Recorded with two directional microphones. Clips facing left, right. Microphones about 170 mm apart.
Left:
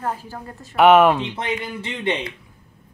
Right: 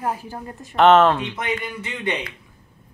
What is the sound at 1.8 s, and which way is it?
Speech, 25° left (ahead or behind).